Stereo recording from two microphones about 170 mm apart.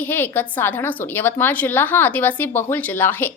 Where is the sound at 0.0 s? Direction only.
10° left (ahead or behind).